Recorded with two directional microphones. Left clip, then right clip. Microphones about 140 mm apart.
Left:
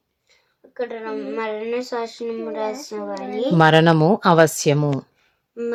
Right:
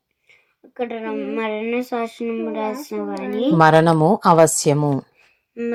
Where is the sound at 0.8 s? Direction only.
25° right (ahead or behind).